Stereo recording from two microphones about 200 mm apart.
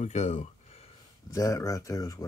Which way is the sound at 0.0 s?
35° left (ahead or behind).